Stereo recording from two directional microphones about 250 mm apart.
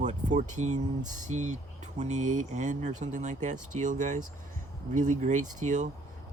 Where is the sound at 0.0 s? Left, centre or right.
Right.